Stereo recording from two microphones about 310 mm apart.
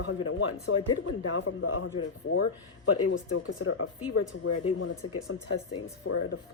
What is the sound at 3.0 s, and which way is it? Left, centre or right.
A woman's voice, left.